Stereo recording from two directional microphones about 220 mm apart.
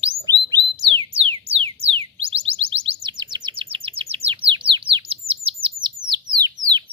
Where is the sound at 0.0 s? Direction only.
20° right (ahead or behind).